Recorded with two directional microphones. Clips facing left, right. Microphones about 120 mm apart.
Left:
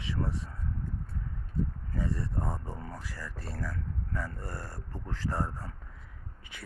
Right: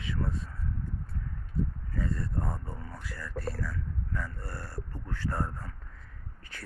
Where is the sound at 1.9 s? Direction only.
20° left (ahead or behind).